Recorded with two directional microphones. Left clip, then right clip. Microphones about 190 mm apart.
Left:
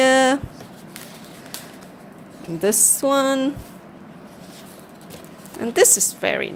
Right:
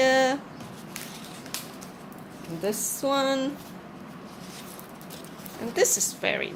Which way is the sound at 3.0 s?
35° left (ahead or behind).